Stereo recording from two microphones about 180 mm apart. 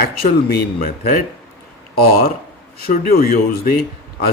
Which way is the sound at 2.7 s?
60° left (ahead or behind).